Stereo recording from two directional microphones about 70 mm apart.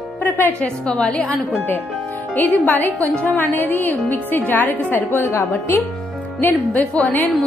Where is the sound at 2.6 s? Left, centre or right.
Left.